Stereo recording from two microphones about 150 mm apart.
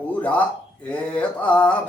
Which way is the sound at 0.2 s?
10° left (ahead or behind).